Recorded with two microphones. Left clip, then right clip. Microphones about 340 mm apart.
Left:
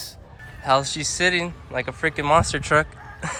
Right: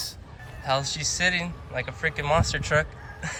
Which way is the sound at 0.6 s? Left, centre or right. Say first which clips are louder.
Left 6 dB; centre.